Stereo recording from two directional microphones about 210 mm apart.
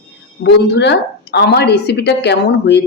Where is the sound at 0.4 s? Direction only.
55° left (ahead or behind).